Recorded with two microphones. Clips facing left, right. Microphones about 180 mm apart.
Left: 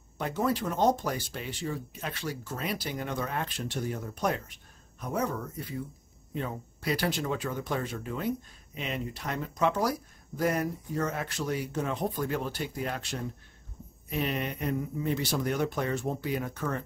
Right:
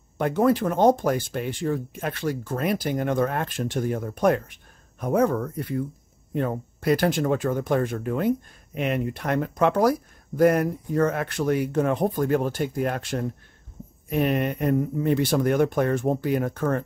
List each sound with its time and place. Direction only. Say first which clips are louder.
0.2 s speech: right 8 dB; 55° right (ahead or behind)